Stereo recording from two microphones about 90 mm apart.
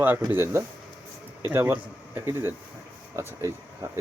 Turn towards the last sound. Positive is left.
turn(degrees=-35)  # may be behind; listen again after turning